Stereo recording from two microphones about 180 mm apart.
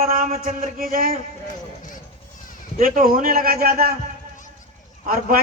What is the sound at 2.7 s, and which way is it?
A man's voice, 55° right (ahead or behind).